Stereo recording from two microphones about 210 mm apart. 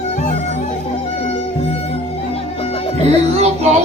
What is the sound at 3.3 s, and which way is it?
Music, 30° right (ahead or behind).